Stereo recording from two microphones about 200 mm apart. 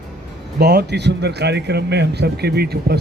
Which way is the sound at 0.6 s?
55° right (ahead or behind).